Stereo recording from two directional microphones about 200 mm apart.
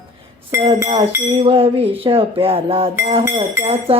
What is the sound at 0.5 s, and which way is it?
Speech, 15° right (ahead or behind).